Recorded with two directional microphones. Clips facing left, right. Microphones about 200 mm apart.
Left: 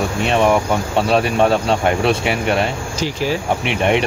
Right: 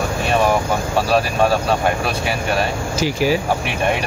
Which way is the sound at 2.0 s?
25° left (ahead or behind).